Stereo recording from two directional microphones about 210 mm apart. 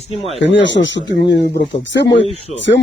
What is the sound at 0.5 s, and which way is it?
Speech, 60° left (ahead or behind).